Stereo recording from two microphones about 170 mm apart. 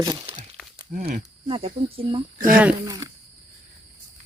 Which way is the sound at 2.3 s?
55° right (ahead or behind).